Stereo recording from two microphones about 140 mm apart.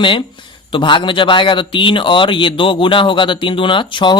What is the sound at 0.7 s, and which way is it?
Speech, 35° left (ahead or behind).